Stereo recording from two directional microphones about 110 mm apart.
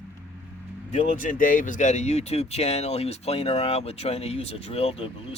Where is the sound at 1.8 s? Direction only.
90° left.